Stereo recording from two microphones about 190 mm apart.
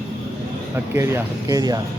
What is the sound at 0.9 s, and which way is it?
Speech, 15° right (ahead or behind).